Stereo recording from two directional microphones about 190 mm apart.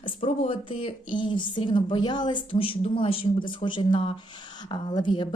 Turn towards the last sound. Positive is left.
turn(degrees=25)  # may be behind; listen again after turning